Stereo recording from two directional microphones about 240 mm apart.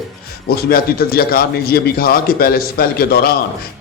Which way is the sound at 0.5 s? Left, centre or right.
Left.